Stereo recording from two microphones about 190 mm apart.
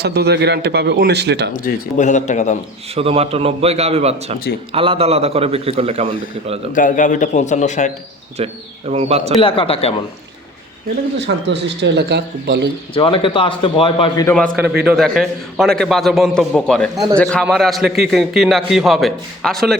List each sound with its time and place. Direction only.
0.0 s a man's voice: 60° right (ahead or behind)
1.5 s a man's voice: 45° left (ahead or behind)
2.9 s a man's voice: 30° right (ahead or behind)
6.7 s a man's voice: 40° left (ahead or behind)
8.4 s a man's voice: 35° right (ahead or behind)
9.4 s a man's voice: 30° left (ahead or behind)
11.2 s a man's voice: 65° right (ahead or behind)
12.9 s a man's voice: 25° left (ahead or behind)
14.5 s a man's voice: centre (ahead or behind)